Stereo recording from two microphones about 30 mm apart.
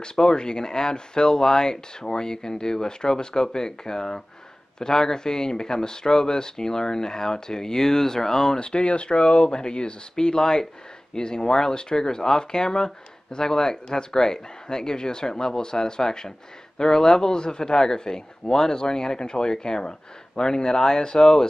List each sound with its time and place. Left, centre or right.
0.0 s speech: left
8.5 s speech: left